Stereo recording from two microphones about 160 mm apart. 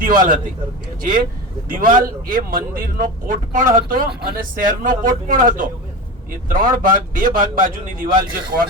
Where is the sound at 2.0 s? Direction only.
65° right (ahead or behind).